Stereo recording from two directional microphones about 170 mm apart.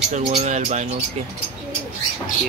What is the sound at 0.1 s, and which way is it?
Speech, 40° right (ahead or behind).